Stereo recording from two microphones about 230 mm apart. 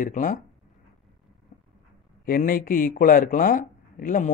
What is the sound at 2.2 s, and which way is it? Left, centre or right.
Speech, left.